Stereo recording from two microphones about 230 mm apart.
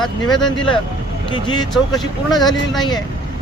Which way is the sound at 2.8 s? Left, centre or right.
Centre.